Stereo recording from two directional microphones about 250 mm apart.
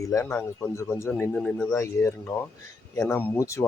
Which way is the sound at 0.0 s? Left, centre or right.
Centre.